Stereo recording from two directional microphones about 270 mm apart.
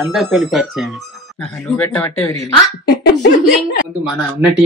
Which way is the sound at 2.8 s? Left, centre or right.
Left.